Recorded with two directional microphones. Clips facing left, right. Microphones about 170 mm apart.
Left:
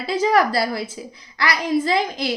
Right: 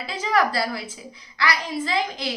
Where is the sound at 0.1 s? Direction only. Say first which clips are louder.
Left 5 dB; 35° left (ahead or behind).